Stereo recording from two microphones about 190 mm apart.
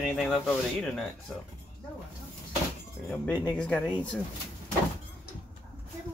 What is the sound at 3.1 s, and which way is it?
Speech, 10° left (ahead or behind).